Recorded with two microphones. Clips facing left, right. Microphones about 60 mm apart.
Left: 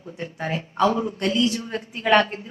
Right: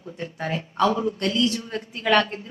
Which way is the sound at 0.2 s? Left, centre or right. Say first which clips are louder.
Left 1 dB; centre.